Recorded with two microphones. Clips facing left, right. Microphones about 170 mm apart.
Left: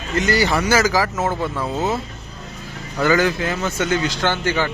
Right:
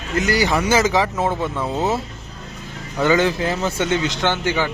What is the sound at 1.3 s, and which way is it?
Speech, centre (ahead or behind).